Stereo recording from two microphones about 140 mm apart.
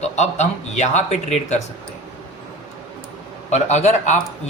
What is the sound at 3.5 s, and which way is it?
Speech, 55° left (ahead or behind).